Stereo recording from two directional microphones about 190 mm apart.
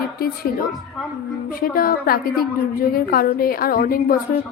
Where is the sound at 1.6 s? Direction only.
50° left (ahead or behind).